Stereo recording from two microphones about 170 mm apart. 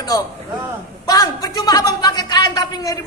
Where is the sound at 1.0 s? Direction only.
25° left (ahead or behind).